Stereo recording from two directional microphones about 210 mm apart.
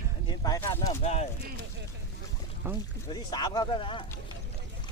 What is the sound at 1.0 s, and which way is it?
Speech, 30° left (ahead or behind).